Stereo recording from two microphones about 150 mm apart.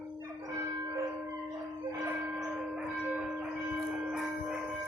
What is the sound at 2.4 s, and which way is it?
Church bell, 5° right (ahead or behind).